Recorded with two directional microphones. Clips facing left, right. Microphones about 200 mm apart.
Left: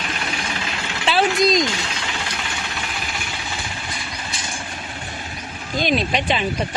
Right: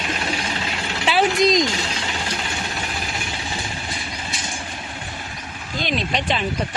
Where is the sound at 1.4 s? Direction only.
20° right (ahead or behind).